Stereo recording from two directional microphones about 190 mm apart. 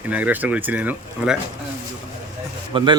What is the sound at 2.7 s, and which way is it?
Speech, 30° right (ahead or behind).